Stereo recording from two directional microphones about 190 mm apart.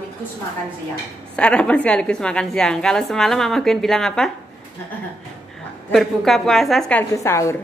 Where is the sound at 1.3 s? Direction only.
5° left (ahead or behind).